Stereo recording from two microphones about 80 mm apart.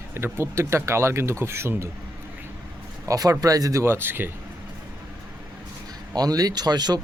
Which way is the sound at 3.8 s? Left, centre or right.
Right.